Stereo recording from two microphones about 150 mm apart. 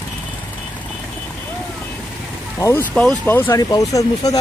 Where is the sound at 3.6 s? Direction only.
25° left (ahead or behind).